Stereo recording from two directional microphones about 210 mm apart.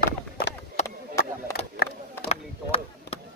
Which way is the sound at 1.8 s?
45° left (ahead or behind).